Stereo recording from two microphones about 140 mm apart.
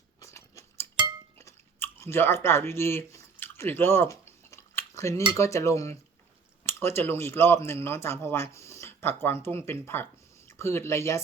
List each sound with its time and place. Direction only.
0.2 s chewing: 20° left (ahead or behind)
5.3 s cutlery: 20° left (ahead or behind)
6.7 s speech: 20° left (ahead or behind)
10.6 s cutlery: 20° left (ahead or behind)